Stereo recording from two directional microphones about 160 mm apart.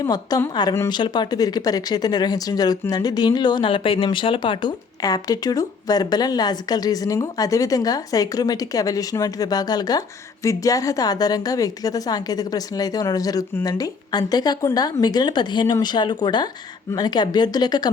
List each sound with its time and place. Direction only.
0.0 s a woman's voice: 25° left (ahead or behind)